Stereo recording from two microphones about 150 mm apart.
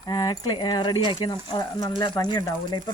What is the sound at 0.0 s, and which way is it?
A woman's voice, 25° left (ahead or behind).